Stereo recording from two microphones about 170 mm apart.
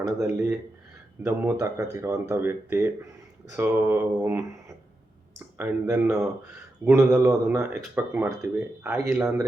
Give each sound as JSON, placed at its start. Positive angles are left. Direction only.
{"t": 0.0, "sound": "speech", "side_deg": -15}
{"t": 5.5, "sound": "speech", "side_deg": -15}
{"t": 7.1, "sound": "speech", "side_deg": -5}